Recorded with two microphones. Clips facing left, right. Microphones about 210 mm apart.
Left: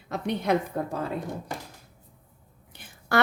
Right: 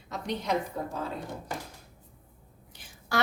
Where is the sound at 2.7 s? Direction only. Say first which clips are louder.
Left 6 dB; 60° left (ahead or behind).